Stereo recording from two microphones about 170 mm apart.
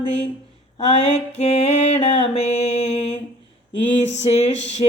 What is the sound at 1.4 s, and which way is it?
Music, 40° left (ahead or behind).